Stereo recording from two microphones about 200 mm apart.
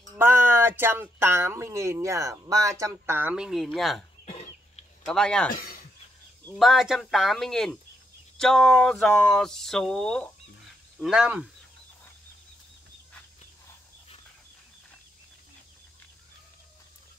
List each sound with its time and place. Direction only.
0.1 s speech: 10° right (ahead or behind)
4.3 s a sound: 30° left (ahead or behind)
5.0 s speech: 5° left (ahead or behind)
5.5 s speech: 45° left (ahead or behind)
6.5 s speech: centre (ahead or behind)